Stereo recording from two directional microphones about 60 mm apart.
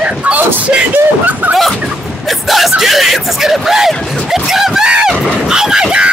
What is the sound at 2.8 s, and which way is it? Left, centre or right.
Speech, centre.